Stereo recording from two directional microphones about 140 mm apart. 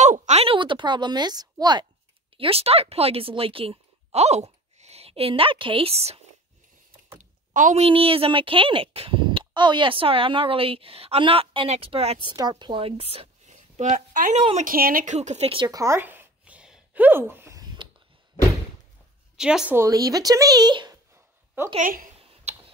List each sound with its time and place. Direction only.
0.3 s speech: 45° right (ahead or behind)
2.3 s speech: 40° right (ahead or behind)
7.5 s a woman's voice: 65° right (ahead or behind)
7.8 s speech: 40° right (ahead or behind)
12.4 s a woman's voice: 30° right (ahead or behind); by 14.4 s 55° right (ahead or behind)
14.6 s speech: 90° right
15.1 s speech: 50° right (ahead or behind)
15.6 s a sound: 25° right (ahead or behind)
19.3 s a woman's voice: 5° right (ahead or behind)
19.7 s speech: 20° right (ahead or behind)
21.7 s speech: 80° right
22.5 s a sound: 50° right (ahead or behind)